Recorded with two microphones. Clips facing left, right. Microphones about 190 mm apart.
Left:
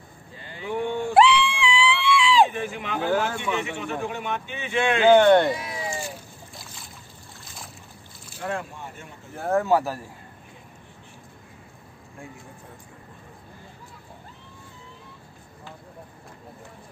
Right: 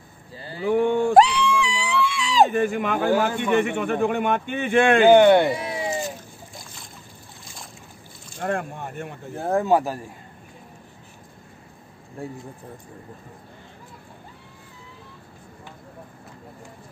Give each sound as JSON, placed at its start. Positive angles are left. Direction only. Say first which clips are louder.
{"t": 0.4, "sound": "a sound", "louder": "right 8 dB", "side_deg": -35}
{"t": 3.4, "sound": "a man's voice", "louder": "right 7 dB", "side_deg": -55}
{"t": 5.0, "sound": "speech", "louder": "even", "side_deg": -10}
{"t": 5.5, "sound": "a sound", "louder": "right 3 dB", "side_deg": -30}
{"t": 8.4, "sound": "speech", "louder": "right 4 dB", "side_deg": -50}
{"t": 9.4, "sound": "speech", "louder": "right 1 dB", "side_deg": -15}
{"t": 12.2, "sound": "speech", "louder": "right 8 dB", "side_deg": -35}